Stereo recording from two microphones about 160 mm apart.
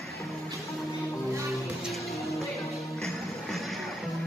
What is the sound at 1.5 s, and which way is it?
Music, centre (ahead or behind).